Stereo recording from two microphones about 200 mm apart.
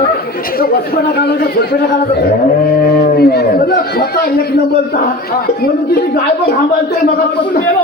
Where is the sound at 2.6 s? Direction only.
50° left (ahead or behind).